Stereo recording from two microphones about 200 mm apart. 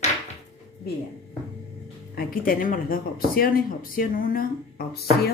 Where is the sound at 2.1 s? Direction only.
45° left (ahead or behind).